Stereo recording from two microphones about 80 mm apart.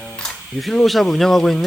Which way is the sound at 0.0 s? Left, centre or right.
Centre.